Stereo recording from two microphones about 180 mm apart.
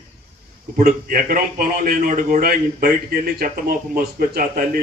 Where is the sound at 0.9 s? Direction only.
55° right (ahead or behind).